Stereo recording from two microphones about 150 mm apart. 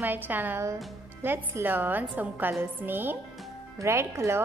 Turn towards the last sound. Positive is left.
turn(degrees=-20)  # may be behind; listen again after turning